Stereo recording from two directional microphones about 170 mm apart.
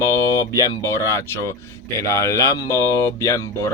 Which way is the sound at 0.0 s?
20° left (ahead or behind).